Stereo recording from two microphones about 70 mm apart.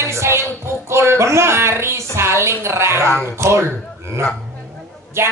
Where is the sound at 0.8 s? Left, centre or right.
Right.